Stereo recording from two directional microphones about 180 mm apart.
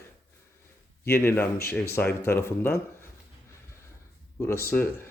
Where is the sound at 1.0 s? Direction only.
15° left (ahead or behind).